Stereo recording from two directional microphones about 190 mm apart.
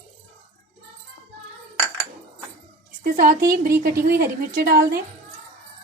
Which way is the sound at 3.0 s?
45° right (ahead or behind).